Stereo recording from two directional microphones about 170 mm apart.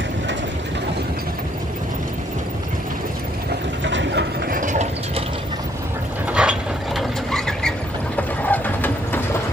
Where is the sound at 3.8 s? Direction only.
90° right.